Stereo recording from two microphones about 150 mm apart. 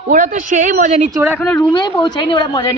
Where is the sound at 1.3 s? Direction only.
10° left (ahead or behind).